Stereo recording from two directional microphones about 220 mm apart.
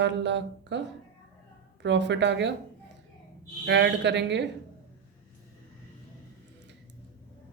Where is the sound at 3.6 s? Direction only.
50° right (ahead or behind).